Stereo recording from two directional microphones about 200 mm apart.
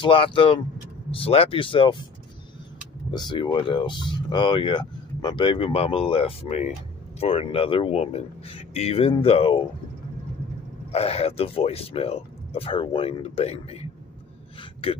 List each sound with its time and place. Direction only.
0.0 s speech: 25° left (ahead or behind)
3.1 s speech: 20° left (ahead or behind)
10.9 s speech: 30° left (ahead or behind)
14.6 s a sound: 25° left (ahead or behind)